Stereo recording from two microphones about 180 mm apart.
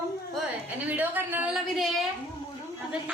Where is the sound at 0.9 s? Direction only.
10° right (ahead or behind).